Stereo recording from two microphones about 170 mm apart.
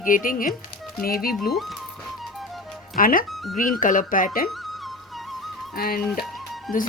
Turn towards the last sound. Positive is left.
turn(degrees=0)  # may be behind; listen again after turning